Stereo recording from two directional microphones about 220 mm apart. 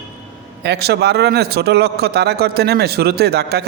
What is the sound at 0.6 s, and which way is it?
A man's voice, 50° right (ahead or behind).